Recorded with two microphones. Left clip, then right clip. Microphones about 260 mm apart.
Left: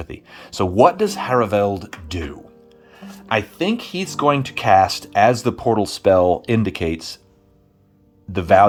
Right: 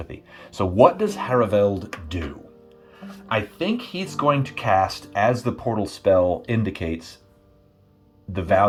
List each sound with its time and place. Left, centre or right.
0.0 s speech: centre
8.3 s speech: left